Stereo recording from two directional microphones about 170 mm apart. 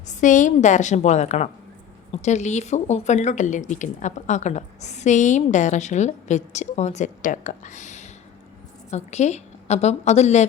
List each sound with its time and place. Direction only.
0.1 s a woman's voice: 50° left (ahead or behind)